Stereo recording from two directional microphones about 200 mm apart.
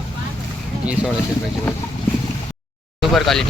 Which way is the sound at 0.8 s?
5° right (ahead or behind).